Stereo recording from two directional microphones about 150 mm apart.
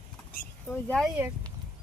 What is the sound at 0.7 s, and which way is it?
Speech, 5° left (ahead or behind).